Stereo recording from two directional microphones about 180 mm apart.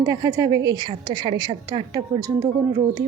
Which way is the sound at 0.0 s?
20° right (ahead or behind).